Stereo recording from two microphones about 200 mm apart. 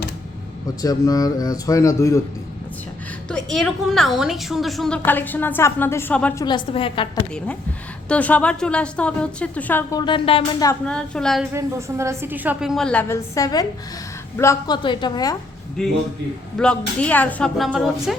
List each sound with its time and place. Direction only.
0.8 s a woman's voice: 20° left (ahead or behind)
3.2 s a woman's voice: centre (ahead or behind)
6.4 s a woman's voice: 25° left (ahead or behind)
8.0 s a woman's voice: 5° left (ahead or behind)
10.0 s a woman's voice: 25° left (ahead or behind)
10.8 s a woman's voice: 5° left (ahead or behind)
11.5 s a woman's voice: 15° right (ahead or behind); by 15.4 s 20° left (ahead or behind)
15.8 s a woman's voice: 5° left (ahead or behind)